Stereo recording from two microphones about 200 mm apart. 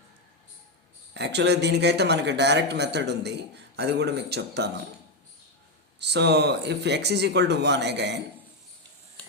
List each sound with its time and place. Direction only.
1.1 s speech: 60° right (ahead or behind)
6.0 s speech: 55° right (ahead or behind)